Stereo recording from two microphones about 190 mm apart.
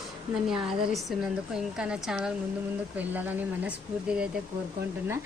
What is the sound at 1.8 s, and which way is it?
A woman's voice, 5° right (ahead or behind).